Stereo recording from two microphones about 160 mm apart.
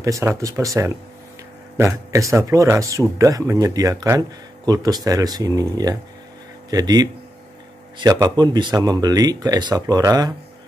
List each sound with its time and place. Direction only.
0.0 s speech: 20° right (ahead or behind)